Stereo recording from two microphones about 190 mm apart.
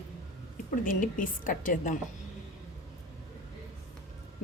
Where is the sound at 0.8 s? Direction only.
45° left (ahead or behind).